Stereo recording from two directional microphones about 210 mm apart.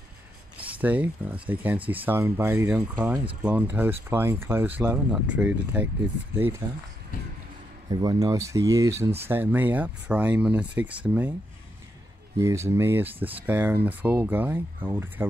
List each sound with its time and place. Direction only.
0.7 s speech: 5° right (ahead or behind)
6.6 s speech: 20° right (ahead or behind)
7.9 s speech: 20° right (ahead or behind)
12.4 s speech: 15° right (ahead or behind)